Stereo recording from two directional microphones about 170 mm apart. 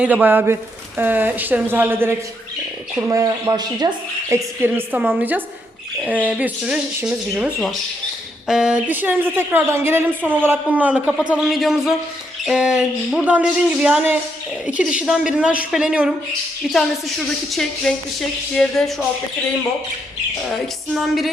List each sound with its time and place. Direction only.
0.0 s a woman's voice: 10° right (ahead or behind)
4.6 s a woman's voice: 10° right (ahead or behind); by 18.9 s 5° left (ahead or behind)
20.5 s speech: centre (ahead or behind)